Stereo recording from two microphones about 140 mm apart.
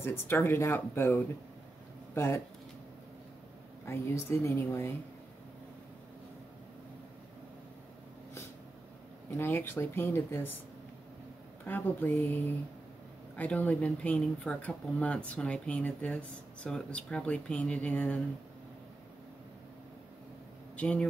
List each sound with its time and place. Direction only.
0.0 s a woman's voice: 15° left (ahead or behind)
3.8 s a woman's voice: 20° left (ahead or behind)
9.4 s speech: 15° left (ahead or behind)
11.6 s speech: 15° left (ahead or behind)
20.7 s speech: 10° left (ahead or behind)